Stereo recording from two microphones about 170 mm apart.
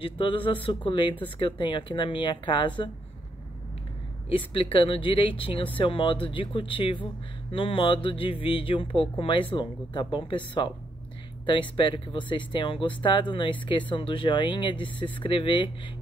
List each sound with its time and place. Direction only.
0.0 s speech: 30° left (ahead or behind)
4.3 s speech: 30° left (ahead or behind)